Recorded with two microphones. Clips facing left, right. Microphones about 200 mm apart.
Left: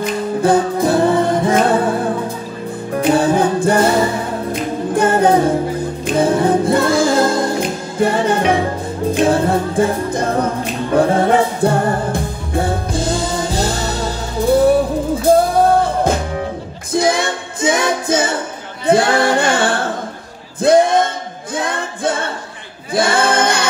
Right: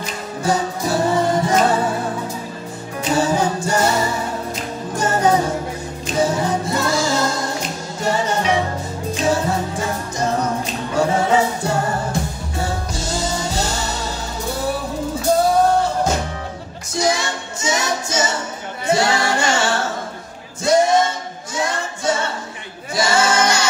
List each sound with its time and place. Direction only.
0.0 s music: 55° left (ahead or behind)
3.0 s a capella: 55° left (ahead or behind)
6.0 s music: 55° left (ahead or behind)
18.9 s singing: 55° left (ahead or behind)
20.6 s a sound: 55° left (ahead or behind)
21.5 s music: 55° left (ahead or behind)
22.9 s a capella: 55° left (ahead or behind)